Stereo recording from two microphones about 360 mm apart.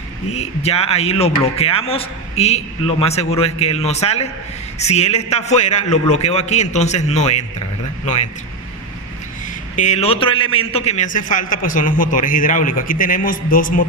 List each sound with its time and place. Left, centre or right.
0.3 s a man's voice: centre
9.7 s a man's voice: centre